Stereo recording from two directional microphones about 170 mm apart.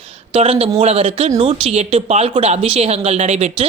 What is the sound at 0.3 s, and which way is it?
A woman's voice, 35° right (ahead or behind).